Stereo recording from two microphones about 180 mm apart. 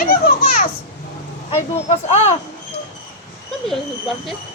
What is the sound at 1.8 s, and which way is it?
Speech, 40° left (ahead or behind).